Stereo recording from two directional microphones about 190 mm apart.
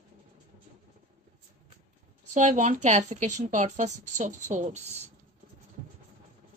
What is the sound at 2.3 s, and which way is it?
A woman's voice, 40° right (ahead or behind).